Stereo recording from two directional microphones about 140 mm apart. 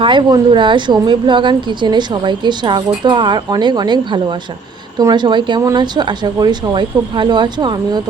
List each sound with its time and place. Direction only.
0.0 s a woman's voice: 35° right (ahead or behind)